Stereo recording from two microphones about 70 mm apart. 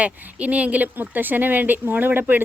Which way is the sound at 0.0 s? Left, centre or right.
Centre.